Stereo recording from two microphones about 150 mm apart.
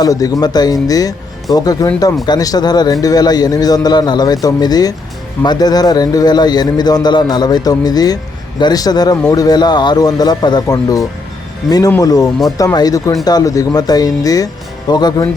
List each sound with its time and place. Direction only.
0.0 s a man's voice: 25° left (ahead or behind)